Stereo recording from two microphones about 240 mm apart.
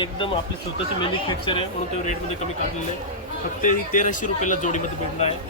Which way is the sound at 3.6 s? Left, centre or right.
Left.